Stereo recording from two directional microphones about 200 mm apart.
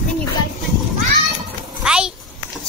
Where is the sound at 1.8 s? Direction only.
5° right (ahead or behind).